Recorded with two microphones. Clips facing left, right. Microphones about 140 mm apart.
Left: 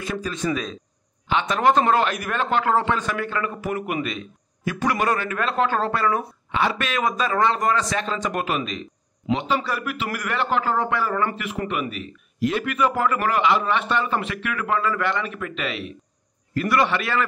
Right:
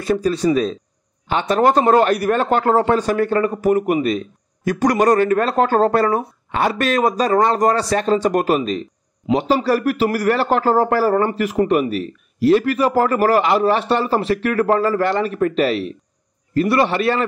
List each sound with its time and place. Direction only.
0.0 s a man's voice: 35° right (ahead or behind)